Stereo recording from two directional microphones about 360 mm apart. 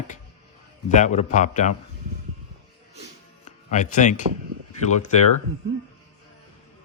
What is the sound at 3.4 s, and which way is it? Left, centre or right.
Music, centre.